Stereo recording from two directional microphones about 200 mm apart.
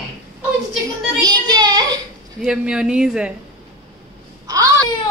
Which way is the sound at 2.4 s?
5° right (ahead or behind).